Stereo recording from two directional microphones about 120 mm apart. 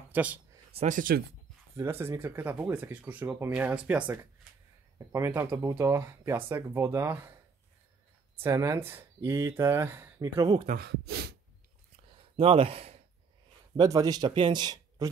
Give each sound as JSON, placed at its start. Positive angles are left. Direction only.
{"t": 0.1, "sound": "speech", "side_deg": -15}
{"t": 0.7, "sound": "speech", "side_deg": -90}
{"t": 1.8, "sound": "speech", "side_deg": -20}
{"t": 4.9, "sound": "speech", "side_deg": -25}
{"t": 8.4, "sound": "speech", "side_deg": -25}
{"t": 12.4, "sound": "speech", "side_deg": -50}
{"t": 13.7, "sound": "speech", "side_deg": -30}